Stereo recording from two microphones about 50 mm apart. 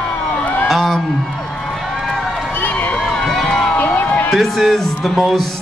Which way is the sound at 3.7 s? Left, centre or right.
Left.